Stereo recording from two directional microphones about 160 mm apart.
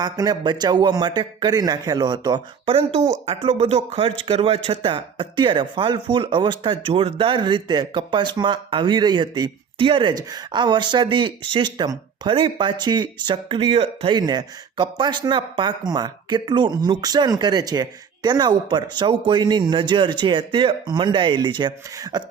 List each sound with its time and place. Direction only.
0.0 s speech: 25° right (ahead or behind)